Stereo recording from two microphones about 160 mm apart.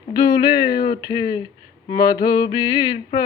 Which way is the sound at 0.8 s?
25° left (ahead or behind).